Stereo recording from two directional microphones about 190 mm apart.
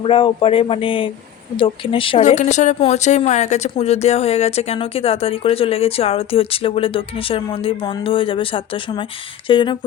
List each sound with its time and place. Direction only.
0.0 s speech: 30° left (ahead or behind)
2.2 s a woman's voice: 40° left (ahead or behind)